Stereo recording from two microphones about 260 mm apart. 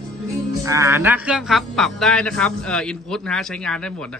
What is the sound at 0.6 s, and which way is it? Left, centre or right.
Speech, centre.